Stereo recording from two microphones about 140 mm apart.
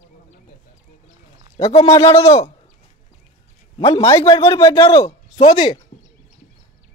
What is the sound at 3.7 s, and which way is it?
Speech, 40° left (ahead or behind).